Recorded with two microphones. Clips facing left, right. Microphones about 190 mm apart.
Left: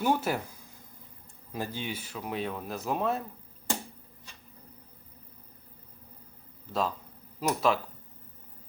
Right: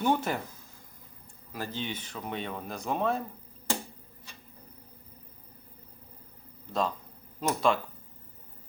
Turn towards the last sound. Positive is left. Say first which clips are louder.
# even
turn(degrees=5)  # may be behind; listen again after turning